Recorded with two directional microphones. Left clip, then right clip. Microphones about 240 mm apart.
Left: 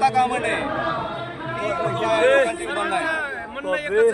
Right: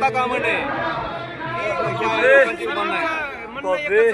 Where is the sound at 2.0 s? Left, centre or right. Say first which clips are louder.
Right 2 dB; left.